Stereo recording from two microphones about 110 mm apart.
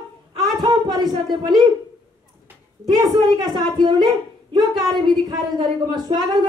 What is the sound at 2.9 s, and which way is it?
A woman's voice, 40° right (ahead or behind).